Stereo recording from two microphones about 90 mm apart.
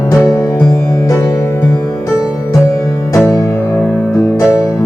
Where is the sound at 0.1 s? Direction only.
30° left (ahead or behind).